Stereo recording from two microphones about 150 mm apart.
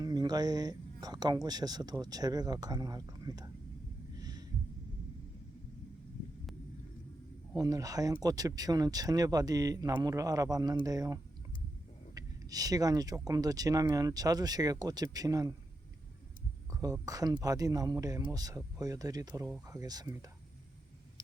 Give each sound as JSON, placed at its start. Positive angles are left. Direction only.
{"t": 0.0, "sound": "speech", "side_deg": -25}
{"t": 4.2, "sound": "a sound", "side_deg": -25}
{"t": 7.5, "sound": "speech", "side_deg": -25}
{"t": 16.8, "sound": "speech", "side_deg": -25}